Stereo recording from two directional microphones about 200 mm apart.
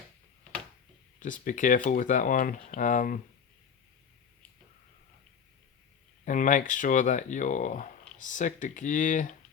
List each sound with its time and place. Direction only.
1.2 s speech: 40° left (ahead or behind)
6.2 s speech: 40° left (ahead or behind)